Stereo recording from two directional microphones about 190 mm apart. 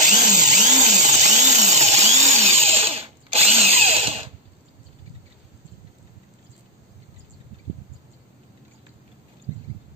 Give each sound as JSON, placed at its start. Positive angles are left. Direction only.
{"t": 0.0, "sound": "tools", "side_deg": -20}
{"t": 0.5, "sound": "tools", "side_deg": -40}
{"t": 2.6, "sound": "drill", "side_deg": -30}